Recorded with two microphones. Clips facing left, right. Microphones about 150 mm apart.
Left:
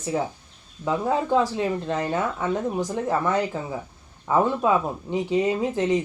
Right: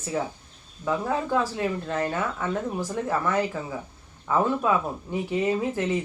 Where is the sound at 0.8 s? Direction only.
20° left (ahead or behind).